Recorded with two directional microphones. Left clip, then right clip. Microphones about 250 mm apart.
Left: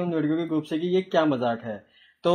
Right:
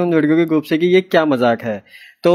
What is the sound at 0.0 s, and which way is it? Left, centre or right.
Speech, right.